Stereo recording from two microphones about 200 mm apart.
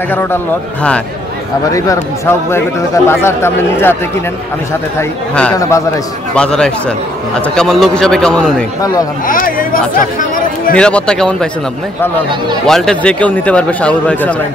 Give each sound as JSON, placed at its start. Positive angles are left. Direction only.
{"t": 0.1, "sound": "a man's voice", "side_deg": 10}
{"t": 1.7, "sound": "a man's voice", "side_deg": 15}
{"t": 5.3, "sound": "a man's voice", "side_deg": 5}
{"t": 9.3, "sound": "speech", "side_deg": 45}
{"t": 10.8, "sound": "a man's voice", "side_deg": 5}
{"t": 12.6, "sound": "a man's voice", "side_deg": 0}